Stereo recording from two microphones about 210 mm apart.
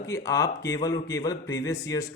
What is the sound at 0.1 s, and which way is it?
Speech, 15° left (ahead or behind).